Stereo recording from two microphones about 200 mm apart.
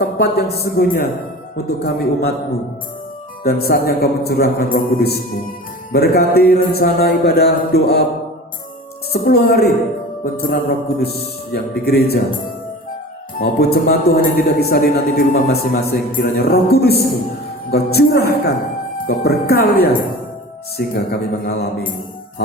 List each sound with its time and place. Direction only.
0.2 s a man's voice: 50° left (ahead or behind)
3.4 s a man's voice: 50° left (ahead or behind)
9.1 s a man's voice: 50° left (ahead or behind)
13.4 s a man's voice: 55° left (ahead or behind)